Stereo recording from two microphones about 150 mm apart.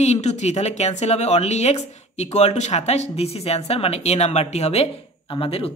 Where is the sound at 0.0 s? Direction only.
50° left (ahead or behind).